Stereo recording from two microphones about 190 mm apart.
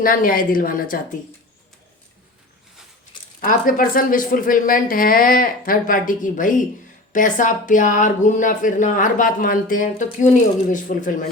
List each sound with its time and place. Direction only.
0.0 s speech: 50° left (ahead or behind)
3.4 s speech: 45° left (ahead or behind)